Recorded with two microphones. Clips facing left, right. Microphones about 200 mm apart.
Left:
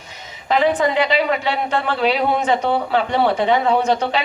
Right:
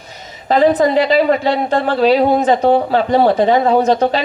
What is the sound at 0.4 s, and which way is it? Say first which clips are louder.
A woman's voice: right 5 dB; 35° right (ahead or behind).